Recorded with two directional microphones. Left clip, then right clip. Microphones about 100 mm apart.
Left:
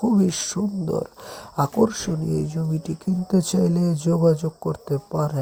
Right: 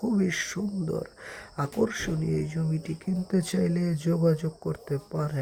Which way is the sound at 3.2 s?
25° right (ahead or behind).